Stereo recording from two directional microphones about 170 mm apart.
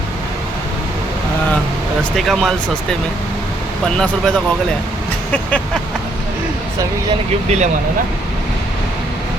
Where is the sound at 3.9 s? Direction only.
5° left (ahead or behind).